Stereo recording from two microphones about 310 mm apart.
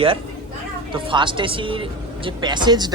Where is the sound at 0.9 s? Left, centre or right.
Centre.